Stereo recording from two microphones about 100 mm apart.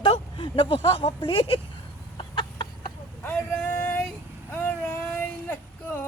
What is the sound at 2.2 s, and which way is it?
Chicken, 50° left (ahead or behind).